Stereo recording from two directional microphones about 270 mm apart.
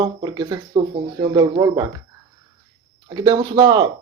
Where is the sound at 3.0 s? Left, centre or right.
Centre.